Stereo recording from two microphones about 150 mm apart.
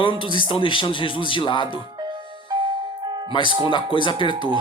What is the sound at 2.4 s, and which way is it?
Music, 30° right (ahead or behind).